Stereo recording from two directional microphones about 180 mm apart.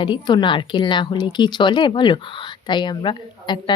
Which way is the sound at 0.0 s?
25° left (ahead or behind).